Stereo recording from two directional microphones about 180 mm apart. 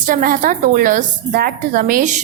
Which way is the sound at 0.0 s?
50° right (ahead or behind).